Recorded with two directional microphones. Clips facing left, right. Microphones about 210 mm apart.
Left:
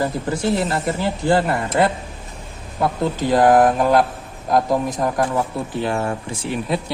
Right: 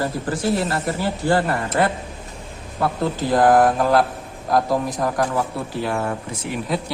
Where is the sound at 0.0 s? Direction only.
20° left (ahead or behind).